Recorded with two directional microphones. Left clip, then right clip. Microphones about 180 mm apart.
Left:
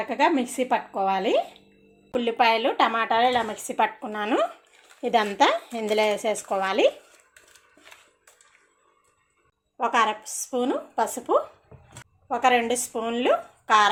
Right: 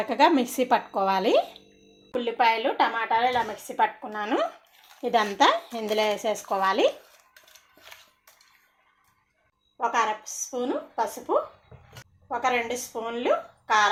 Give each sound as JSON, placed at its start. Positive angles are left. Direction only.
{"t": 0.0, "sound": "speech", "side_deg": -15}
{"t": 2.1, "sound": "a woman's voice", "side_deg": 25}
{"t": 5.0, "sound": "speech", "side_deg": 5}
{"t": 9.7, "sound": "a woman's voice", "side_deg": 45}